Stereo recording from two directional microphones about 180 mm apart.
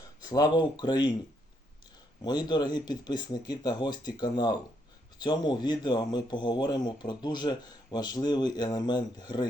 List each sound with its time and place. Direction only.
0.0 s speech: 20° left (ahead or behind)
2.2 s speech: 25° left (ahead or behind)